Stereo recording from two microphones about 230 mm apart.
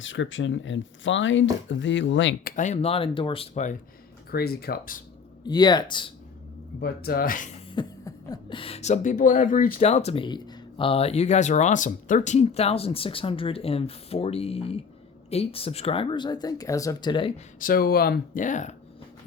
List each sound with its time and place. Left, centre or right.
0.0 s speech: left
2.5 s speech: left
4.3 s speech: left
5.5 s speech: centre
6.7 s speech: left
7.7 s speech: centre
17.6 s speech: left